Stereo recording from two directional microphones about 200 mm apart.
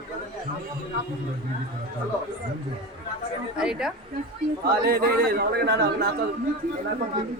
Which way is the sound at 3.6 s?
5° right (ahead or behind).